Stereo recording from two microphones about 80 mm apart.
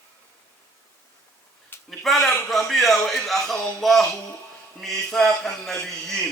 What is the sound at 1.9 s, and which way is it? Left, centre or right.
A man's voice, centre.